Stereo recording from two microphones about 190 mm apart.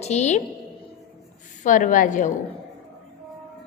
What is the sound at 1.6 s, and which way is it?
Speech, 45° left (ahead or behind).